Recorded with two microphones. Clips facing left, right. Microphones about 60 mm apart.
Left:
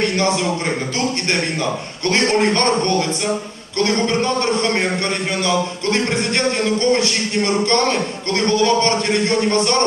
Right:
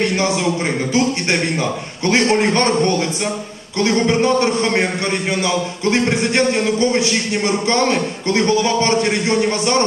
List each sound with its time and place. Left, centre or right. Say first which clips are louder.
2.0 s a man's voice: right 1 dB; centre